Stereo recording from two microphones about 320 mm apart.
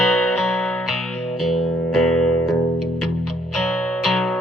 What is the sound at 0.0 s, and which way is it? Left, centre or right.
Music, left.